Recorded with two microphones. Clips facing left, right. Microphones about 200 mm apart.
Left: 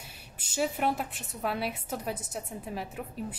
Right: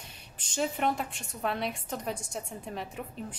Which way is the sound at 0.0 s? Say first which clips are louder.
Left 1 dB; 5° left (ahead or behind).